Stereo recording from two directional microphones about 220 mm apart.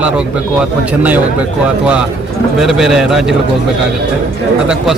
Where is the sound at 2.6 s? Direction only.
Centre (ahead or behind).